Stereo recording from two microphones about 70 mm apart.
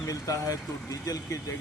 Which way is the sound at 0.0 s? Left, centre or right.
Left.